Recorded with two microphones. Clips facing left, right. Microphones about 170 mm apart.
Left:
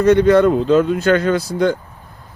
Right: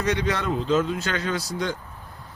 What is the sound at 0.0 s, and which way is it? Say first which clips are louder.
Speech: left 14 dB; 55° left (ahead or behind).